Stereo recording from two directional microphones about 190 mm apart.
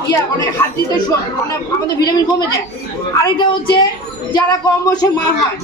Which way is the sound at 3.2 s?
25° left (ahead or behind).